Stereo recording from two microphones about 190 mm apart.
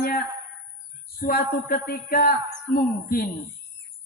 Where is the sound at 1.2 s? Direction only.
50° left (ahead or behind).